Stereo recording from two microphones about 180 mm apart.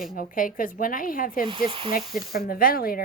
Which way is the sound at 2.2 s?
55° left (ahead or behind).